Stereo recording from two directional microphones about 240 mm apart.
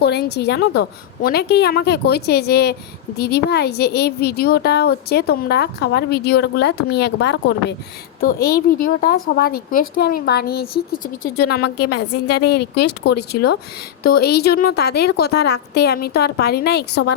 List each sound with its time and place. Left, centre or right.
0.0 s a woman's voice: left
14.0 s a woman's voice: left